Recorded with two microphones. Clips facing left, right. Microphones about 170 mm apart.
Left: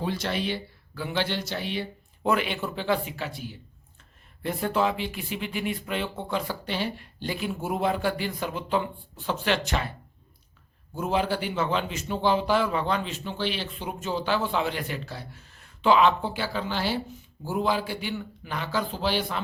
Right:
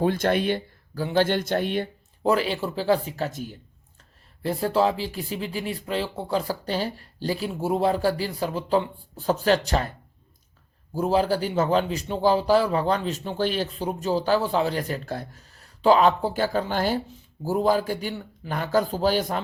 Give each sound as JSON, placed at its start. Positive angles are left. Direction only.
{"t": 0.0, "sound": "speech", "side_deg": -50}
{"t": 2.2, "sound": "a man's voice", "side_deg": -35}
{"t": 4.4, "sound": "a man's voice", "side_deg": -35}
{"t": 10.9, "sound": "a man's voice", "side_deg": -35}